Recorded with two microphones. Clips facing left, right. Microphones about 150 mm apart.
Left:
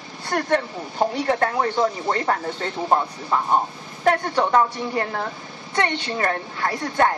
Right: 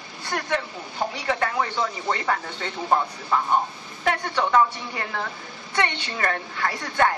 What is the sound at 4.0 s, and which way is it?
A woman's voice, 40° left (ahead or behind).